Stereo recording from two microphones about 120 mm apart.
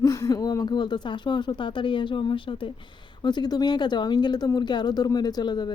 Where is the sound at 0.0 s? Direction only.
30° left (ahead or behind).